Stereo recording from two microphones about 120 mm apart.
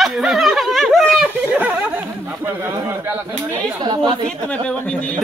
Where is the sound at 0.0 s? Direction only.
5° right (ahead or behind).